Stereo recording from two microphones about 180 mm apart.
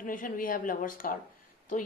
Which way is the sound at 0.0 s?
50° left (ahead or behind).